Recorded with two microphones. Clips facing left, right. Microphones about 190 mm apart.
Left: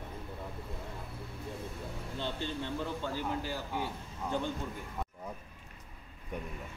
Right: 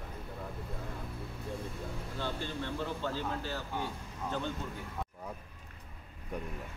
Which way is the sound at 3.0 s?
15° left (ahead or behind).